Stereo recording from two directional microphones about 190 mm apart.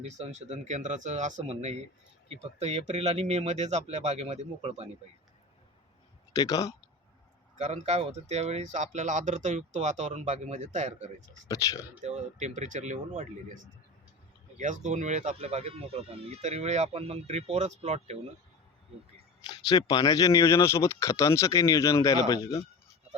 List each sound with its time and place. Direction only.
0.0 s speech: 35° right (ahead or behind)
6.3 s speech: 20° left (ahead or behind)
7.6 s speech: 35° right (ahead or behind)
11.4 s speech: 20° left (ahead or behind)
12.0 s speech: 40° right (ahead or behind)
14.6 s speech: 40° right (ahead or behind)
19.5 s speech: 20° left (ahead or behind)